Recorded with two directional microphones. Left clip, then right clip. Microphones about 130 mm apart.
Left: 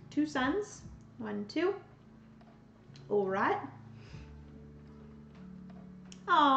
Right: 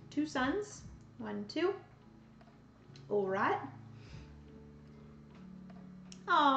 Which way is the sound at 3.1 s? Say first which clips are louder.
Left 2 dB; 5° left (ahead or behind).